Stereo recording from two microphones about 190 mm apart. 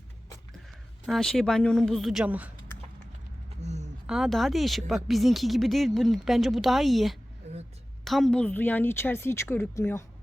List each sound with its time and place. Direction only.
1.0 s speech: centre (ahead or behind)
3.6 s a sound: 35° right (ahead or behind)
4.0 s a woman's voice: centre (ahead or behind)